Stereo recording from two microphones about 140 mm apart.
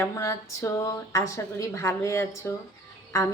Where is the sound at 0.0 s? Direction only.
20° left (ahead or behind).